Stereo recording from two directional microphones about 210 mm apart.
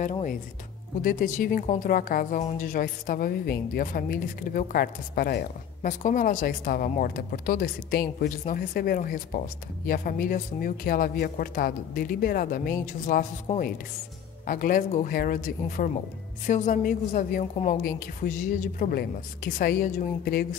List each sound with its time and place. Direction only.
0.0 s a woman's voice: 35° left (ahead or behind)
13.5 s speech: 30° left (ahead or behind)
14.4 s a woman's voice: 40° left (ahead or behind)